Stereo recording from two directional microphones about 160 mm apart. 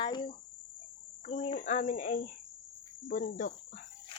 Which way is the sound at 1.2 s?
40° left (ahead or behind).